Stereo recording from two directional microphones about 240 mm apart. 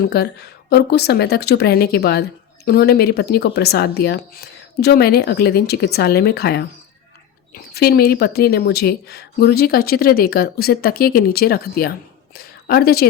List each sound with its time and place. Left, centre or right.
0.1 s a woman's voice: left